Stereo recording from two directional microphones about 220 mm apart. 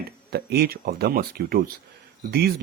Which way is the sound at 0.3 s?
45° right (ahead or behind).